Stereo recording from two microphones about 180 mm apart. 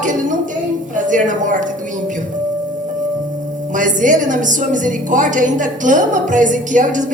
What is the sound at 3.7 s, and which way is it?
A woman's voice, 45° right (ahead or behind).